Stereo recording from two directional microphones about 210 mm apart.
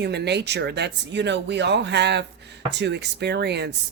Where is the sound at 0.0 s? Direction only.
55° right (ahead or behind).